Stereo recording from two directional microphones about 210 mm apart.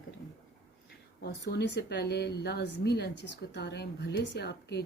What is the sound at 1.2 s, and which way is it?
Speech, 55° left (ahead or behind).